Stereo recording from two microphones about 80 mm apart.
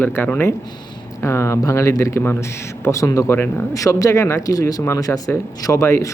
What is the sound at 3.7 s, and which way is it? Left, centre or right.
A man's voice, left.